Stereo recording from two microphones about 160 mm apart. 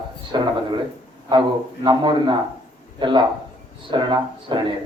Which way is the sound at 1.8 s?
30° right (ahead or behind).